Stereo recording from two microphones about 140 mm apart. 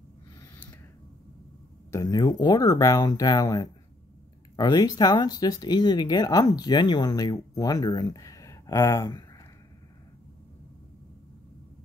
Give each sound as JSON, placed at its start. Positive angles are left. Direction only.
{"t": 1.9, "sound": "speech", "side_deg": 25}